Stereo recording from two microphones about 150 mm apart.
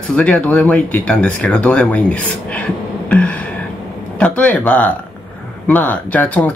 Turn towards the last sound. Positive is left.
turn(degrees=10)  # may be behind; listen again after turning